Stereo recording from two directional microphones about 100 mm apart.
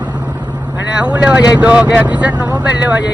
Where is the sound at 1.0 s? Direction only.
10° right (ahead or behind).